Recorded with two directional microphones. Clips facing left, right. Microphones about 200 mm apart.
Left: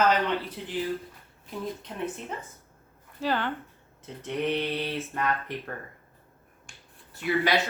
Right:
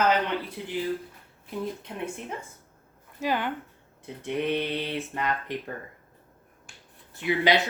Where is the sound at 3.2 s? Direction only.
15° right (ahead or behind).